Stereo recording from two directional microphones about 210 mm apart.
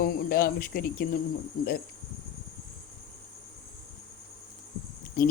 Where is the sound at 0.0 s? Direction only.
45° left (ahead or behind).